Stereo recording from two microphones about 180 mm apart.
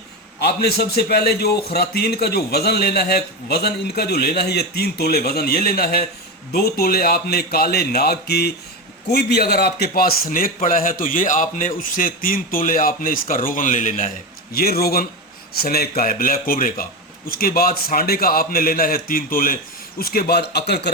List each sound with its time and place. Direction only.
0.3 s a man's voice: 65° left (ahead or behind); by 14.1 s 45° left (ahead or behind)
14.5 s a man's voice: 60° left (ahead or behind)